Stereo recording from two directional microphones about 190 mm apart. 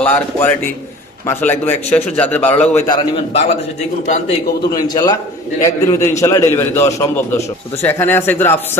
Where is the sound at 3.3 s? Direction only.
35° left (ahead or behind).